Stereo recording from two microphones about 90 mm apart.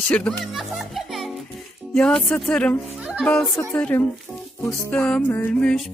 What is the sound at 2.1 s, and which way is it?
Music, 10° left (ahead or behind).